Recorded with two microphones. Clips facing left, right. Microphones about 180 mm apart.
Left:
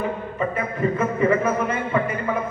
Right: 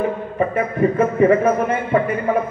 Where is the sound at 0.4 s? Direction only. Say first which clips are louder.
Right 6 dB; 50° right (ahead or behind).